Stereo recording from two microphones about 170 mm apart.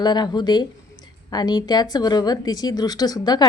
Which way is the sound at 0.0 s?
25° left (ahead or behind).